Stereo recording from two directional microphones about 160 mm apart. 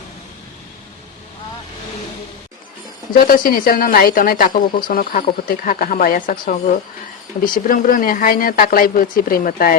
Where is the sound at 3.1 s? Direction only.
70° left (ahead or behind).